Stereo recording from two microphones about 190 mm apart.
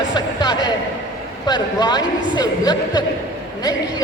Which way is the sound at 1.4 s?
20° left (ahead or behind).